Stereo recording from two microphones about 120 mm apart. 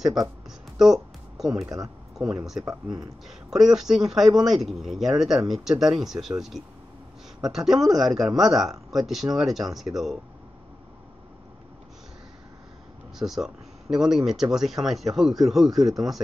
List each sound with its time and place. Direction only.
0.7 s music: 5° right (ahead or behind)
2.1 s speech: 5° right (ahead or behind)
2.6 s speech: 30° right (ahead or behind)
3.3 s speech: 5° right (ahead or behind)
13.2 s speech: 5° right (ahead or behind)